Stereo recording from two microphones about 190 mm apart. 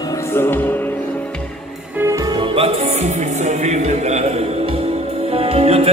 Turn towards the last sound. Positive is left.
turn(degrees=-30)  # may be behind; listen again after turning